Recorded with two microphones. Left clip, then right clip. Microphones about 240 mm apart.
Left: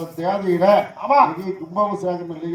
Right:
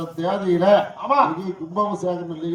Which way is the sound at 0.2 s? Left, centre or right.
Right.